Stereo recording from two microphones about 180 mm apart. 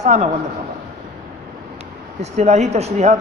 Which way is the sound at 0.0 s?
40° right (ahead or behind).